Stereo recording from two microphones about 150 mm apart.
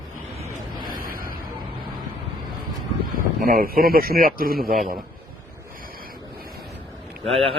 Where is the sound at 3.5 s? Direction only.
75° right (ahead or behind).